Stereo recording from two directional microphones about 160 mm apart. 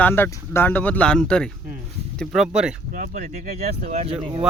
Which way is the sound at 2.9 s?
55° right (ahead or behind).